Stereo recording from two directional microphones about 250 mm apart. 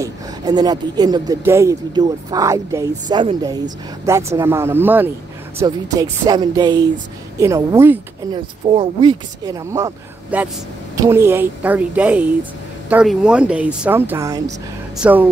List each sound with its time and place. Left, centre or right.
0.0 s speech: centre
8.6 s speech: centre